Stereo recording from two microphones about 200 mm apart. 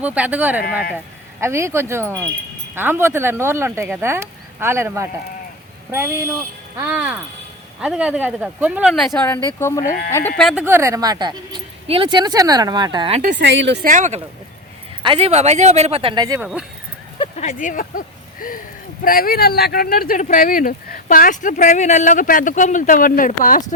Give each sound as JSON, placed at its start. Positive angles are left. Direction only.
{"t": 0.0, "sound": "speech", "side_deg": -5}
{"t": 6.7, "sound": "speech", "side_deg": -5}
{"t": 13.3, "sound": "speech", "side_deg": -65}
{"t": 13.8, "sound": "speech", "side_deg": -40}
{"t": 15.0, "sound": "speech", "side_deg": -25}
{"t": 16.4, "sound": "speech", "side_deg": -5}
{"t": 17.2, "sound": "speech", "side_deg": 35}